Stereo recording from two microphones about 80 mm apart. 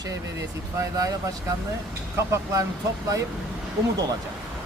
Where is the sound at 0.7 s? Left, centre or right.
Right.